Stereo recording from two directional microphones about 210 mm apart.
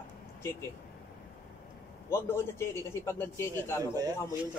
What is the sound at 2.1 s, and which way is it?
A man's voice, 10° left (ahead or behind).